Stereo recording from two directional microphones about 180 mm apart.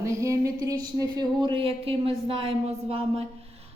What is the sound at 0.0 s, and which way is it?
A woman's voice, 15° right (ahead or behind).